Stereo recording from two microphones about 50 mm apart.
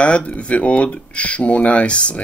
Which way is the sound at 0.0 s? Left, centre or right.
Left.